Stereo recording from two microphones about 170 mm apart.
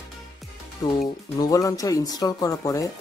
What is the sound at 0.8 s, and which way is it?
Speech, 25° left (ahead or behind).